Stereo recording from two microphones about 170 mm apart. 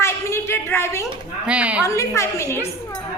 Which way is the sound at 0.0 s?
15° left (ahead or behind).